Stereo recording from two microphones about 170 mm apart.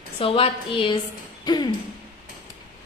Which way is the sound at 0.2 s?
35° left (ahead or behind).